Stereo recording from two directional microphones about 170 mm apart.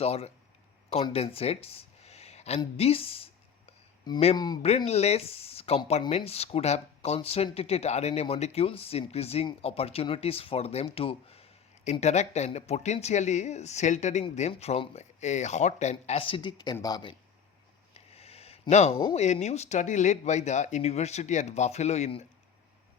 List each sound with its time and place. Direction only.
0.0 s speech: 35° left (ahead or behind)
4.9 s speech: 40° left (ahead or behind)
17.9 s speech: 35° left (ahead or behind)